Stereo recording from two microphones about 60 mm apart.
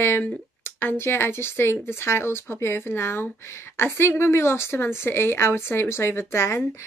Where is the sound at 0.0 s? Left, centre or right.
Left.